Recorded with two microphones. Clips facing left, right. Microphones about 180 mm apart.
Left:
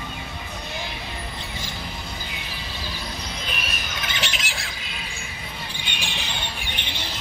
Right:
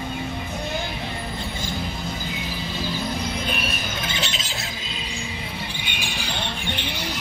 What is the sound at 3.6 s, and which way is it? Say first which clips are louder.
Squawk: right 4 dB; 30° right (ahead or behind).